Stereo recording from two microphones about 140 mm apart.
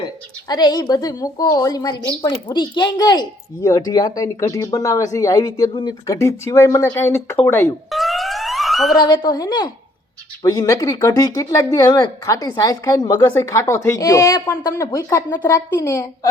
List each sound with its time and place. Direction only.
0.4 s a woman's voice: 30° left (ahead or behind)
7.9 s police car: centre (ahead or behind)
9.0 s a woman's voice: 30° left (ahead or behind)